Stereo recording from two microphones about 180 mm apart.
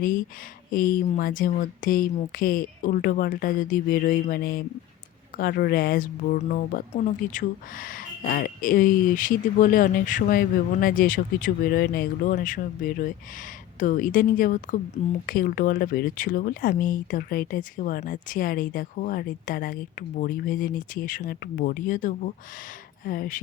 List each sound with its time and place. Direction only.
0.7 s speech: 50° left (ahead or behind)